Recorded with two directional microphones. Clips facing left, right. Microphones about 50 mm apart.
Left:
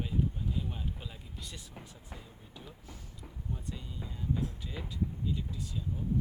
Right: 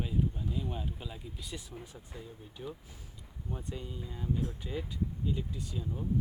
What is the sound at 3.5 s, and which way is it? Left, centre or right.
Speech, right.